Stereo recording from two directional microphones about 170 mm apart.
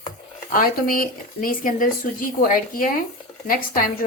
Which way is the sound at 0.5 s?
55° left (ahead or behind).